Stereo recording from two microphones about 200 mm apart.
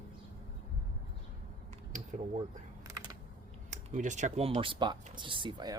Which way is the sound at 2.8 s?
20° right (ahead or behind).